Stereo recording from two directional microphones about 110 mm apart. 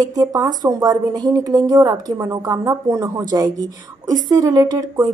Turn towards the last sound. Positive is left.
turn(degrees=-35)  # may be behind; listen again after turning